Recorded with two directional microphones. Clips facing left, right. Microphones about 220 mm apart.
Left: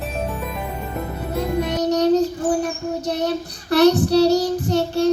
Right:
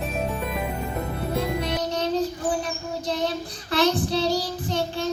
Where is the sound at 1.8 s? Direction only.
45° left (ahead or behind).